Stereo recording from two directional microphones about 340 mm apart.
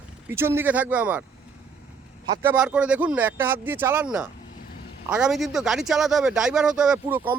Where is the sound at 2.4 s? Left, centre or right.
Centre.